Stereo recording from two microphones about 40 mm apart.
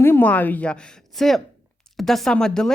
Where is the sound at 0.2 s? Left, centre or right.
Left.